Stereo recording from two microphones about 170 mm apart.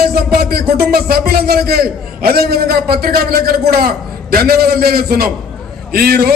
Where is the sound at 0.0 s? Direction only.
65° right (ahead or behind).